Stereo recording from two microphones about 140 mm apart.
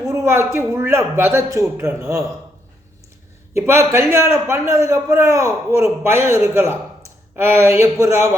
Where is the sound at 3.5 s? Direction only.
20° right (ahead or behind).